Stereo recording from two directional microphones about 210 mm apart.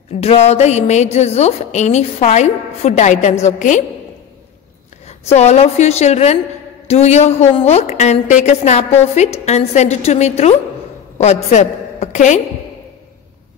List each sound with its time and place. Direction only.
0.2 s a woman's voice: 30° left (ahead or behind)
5.0 s a woman's voice: 30° left (ahead or behind)
11.5 s a woman's voice: 35° left (ahead or behind)